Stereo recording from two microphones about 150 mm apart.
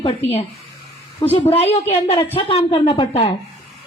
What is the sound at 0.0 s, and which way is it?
A woman's voice, 45° left (ahead or behind).